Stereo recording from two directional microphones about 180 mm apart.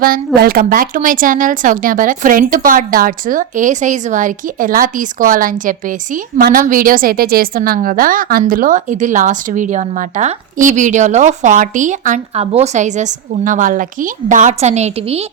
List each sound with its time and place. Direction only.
0.3 s speech: 55° right (ahead or behind); by 15.3 s 35° right (ahead or behind)